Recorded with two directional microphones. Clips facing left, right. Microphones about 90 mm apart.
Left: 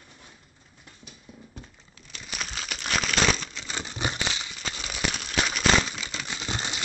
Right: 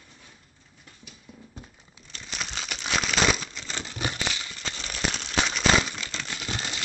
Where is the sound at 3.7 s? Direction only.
15° left (ahead or behind).